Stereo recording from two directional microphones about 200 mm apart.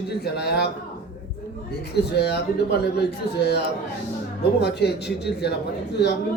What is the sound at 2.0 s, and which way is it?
A man's voice, 55° left (ahead or behind).